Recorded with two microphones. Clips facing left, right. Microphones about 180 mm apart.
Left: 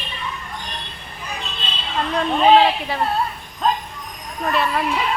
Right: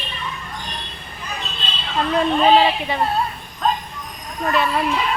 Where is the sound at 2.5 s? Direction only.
Centre (ahead or behind).